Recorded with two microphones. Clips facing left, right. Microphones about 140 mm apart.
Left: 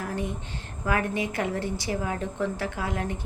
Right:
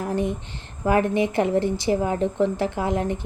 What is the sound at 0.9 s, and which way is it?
A woman's voice, 30° right (ahead or behind).